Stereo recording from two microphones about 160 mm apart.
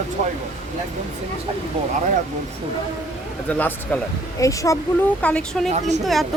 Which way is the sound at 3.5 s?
10° left (ahead or behind).